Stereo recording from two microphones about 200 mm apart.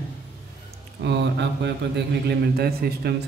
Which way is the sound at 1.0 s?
60° right (ahead or behind).